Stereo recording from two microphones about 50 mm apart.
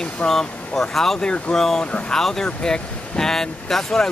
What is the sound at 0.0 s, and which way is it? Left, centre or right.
Speech, centre.